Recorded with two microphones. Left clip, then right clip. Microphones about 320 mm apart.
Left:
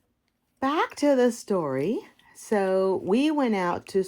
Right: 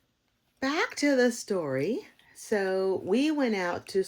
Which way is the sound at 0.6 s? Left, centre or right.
Centre.